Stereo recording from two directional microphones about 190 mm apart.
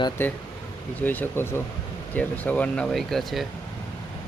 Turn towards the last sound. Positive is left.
turn(degrees=0)  # may be behind; listen again after turning